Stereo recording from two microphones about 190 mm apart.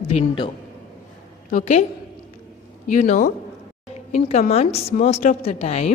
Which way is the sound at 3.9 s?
35° left (ahead or behind).